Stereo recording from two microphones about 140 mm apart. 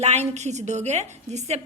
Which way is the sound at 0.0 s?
50° right (ahead or behind).